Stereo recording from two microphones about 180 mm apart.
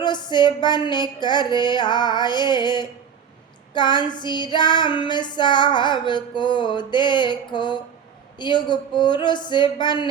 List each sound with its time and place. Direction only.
0.0 s child singing: 25° left (ahead or behind)